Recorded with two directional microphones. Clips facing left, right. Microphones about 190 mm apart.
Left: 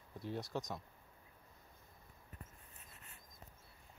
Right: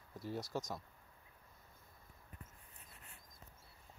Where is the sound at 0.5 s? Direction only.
5° right (ahead or behind).